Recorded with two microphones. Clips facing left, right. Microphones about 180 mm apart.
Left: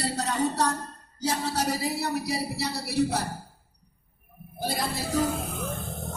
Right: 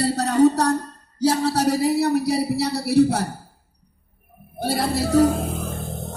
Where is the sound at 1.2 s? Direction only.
65° right (ahead or behind).